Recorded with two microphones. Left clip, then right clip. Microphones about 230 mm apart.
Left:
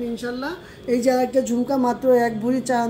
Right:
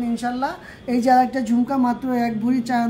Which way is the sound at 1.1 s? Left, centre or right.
Right.